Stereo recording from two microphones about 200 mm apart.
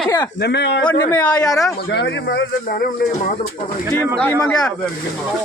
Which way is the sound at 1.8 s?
55° left (ahead or behind).